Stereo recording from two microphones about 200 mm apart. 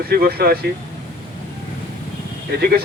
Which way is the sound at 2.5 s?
50° right (ahead or behind).